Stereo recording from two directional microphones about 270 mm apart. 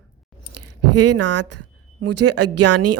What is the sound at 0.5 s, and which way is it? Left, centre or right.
Speech, right.